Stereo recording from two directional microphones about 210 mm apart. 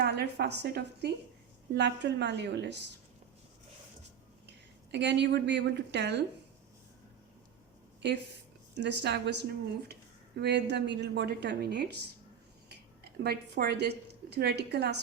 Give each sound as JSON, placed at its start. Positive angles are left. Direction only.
{"t": 0.0, "sound": "a woman's voice", "side_deg": -55}
{"t": 4.4, "sound": "a woman's voice", "side_deg": -55}
{"t": 8.7, "sound": "a woman's voice", "side_deg": -55}
{"t": 13.2, "sound": "a woman's voice", "side_deg": -50}